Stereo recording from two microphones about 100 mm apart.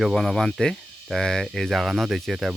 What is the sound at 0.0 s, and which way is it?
Speech, centre (ahead or behind).